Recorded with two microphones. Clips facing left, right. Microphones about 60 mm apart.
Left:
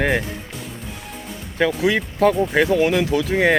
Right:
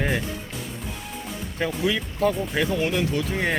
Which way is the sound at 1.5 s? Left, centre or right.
Left.